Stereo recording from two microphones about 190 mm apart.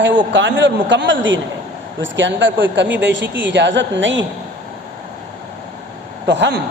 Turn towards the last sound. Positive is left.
turn(degrees=-70)  # may be behind; listen again after turning